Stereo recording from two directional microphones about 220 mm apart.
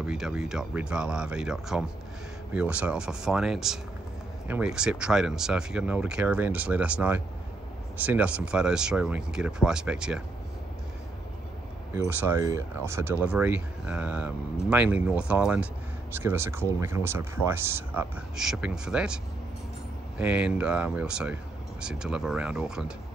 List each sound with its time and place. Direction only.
0.0 s speech: 5° right (ahead or behind)
11.9 s speech: 10° right (ahead or behind)
20.2 s speech: 5° right (ahead or behind)